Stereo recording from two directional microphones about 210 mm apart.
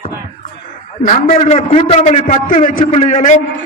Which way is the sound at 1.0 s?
35° left (ahead or behind).